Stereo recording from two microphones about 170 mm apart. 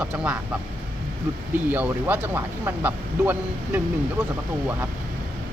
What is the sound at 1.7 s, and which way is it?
Speech, 10° right (ahead or behind).